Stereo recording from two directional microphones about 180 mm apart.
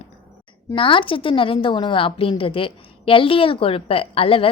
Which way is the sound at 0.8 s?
30° left (ahead or behind).